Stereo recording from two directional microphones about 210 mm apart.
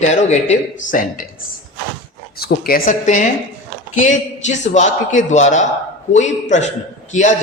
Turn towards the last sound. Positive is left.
turn(degrees=35)  # may be behind; listen again after turning